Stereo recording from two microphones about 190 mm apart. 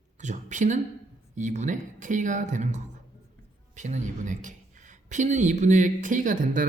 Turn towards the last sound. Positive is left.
turn(degrees=-40)  # may be behind; listen again after turning